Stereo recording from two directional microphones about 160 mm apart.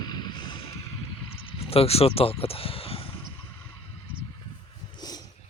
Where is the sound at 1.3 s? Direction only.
35° left (ahead or behind).